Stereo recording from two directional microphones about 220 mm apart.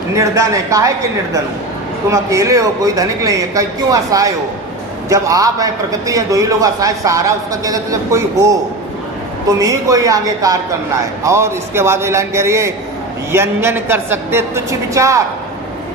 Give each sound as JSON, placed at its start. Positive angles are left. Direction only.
{"t": 0.1, "sound": "a man's voice", "side_deg": -15}
{"t": 2.0, "sound": "a man's voice", "side_deg": -15}
{"t": 9.6, "sound": "a man's voice", "side_deg": -15}